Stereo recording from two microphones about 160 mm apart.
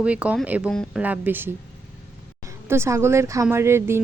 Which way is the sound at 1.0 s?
10° right (ahead or behind).